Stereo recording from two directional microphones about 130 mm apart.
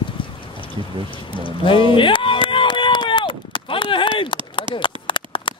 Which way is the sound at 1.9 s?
40° left (ahead or behind).